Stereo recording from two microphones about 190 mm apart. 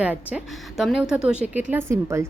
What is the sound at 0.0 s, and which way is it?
A woman's voice, 5° right (ahead or behind).